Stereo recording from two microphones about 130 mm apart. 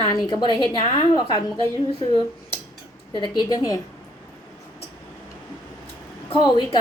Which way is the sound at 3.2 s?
35° left (ahead or behind).